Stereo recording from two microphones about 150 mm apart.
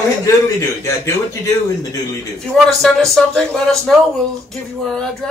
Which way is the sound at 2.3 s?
Centre (ahead or behind).